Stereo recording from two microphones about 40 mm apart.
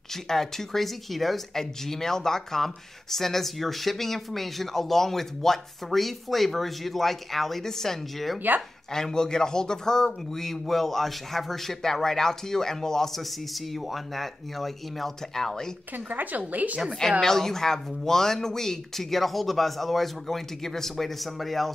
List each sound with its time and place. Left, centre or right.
0.1 s speech: centre
16.1 s a woman's voice: right
17.2 s speech: centre